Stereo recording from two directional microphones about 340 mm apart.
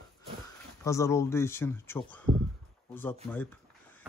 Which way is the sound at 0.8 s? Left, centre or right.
Centre.